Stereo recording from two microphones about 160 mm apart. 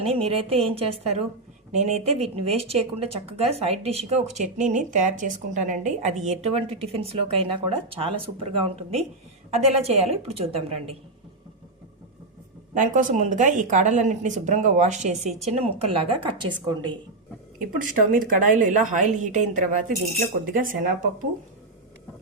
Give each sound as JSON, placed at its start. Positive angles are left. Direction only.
{"t": 0.0, "sound": "speech", "side_deg": -35}
{"t": 12.7, "sound": "speech", "side_deg": -55}
{"t": 17.7, "sound": "speech", "side_deg": -55}